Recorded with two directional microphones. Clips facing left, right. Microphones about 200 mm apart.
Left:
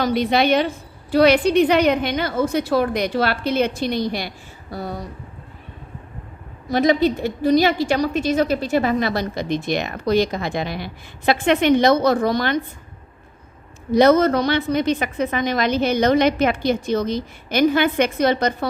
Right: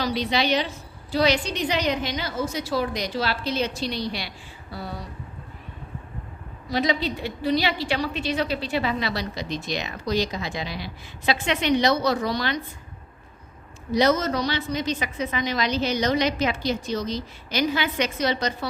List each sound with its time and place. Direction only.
0.0 s a woman's voice: 50° left (ahead or behind)
6.7 s a woman's voice: 50° left (ahead or behind)
13.9 s a woman's voice: 55° left (ahead or behind)